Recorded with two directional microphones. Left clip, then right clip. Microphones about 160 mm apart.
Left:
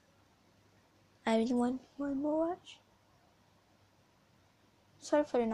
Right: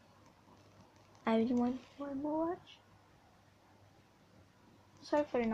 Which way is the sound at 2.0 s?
45° left (ahead or behind).